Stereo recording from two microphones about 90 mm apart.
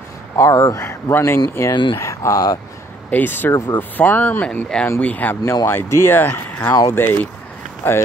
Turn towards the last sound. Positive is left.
turn(degrees=25)  # may be behind; listen again after turning